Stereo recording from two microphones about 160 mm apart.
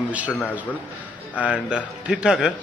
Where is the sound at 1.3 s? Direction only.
5° right (ahead or behind).